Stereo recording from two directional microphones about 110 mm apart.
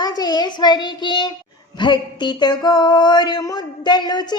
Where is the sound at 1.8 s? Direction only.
45° left (ahead or behind).